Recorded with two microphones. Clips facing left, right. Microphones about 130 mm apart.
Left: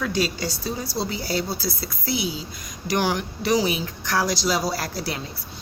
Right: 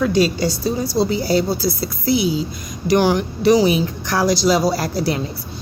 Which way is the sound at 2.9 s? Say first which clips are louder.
Right 8 dB; 30° right (ahead or behind).